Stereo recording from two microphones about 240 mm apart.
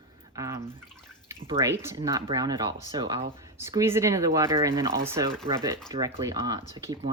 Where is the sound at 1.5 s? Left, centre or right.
Centre.